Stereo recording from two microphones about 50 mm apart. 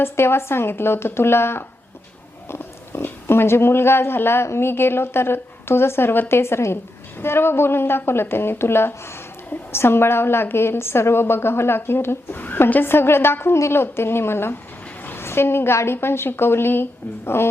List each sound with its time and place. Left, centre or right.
0.0 s a woman's voice: left
12.4 s a woman's voice: left